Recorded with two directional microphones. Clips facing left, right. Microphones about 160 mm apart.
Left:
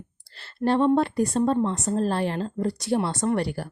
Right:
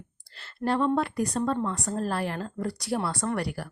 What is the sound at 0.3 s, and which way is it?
Speech, 30° left (ahead or behind).